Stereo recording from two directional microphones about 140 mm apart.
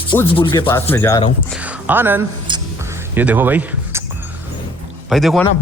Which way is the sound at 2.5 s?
35° right (ahead or behind).